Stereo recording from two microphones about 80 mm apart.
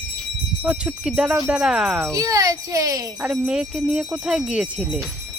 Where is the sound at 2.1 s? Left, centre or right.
Right.